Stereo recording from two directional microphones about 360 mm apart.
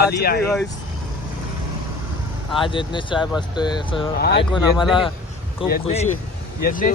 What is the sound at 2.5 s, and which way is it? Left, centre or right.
Speech, centre.